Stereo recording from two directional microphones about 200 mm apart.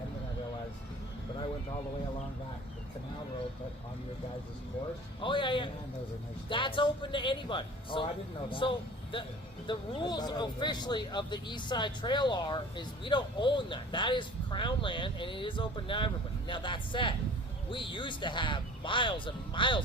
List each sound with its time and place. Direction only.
5.2 s speech: 25° left (ahead or behind)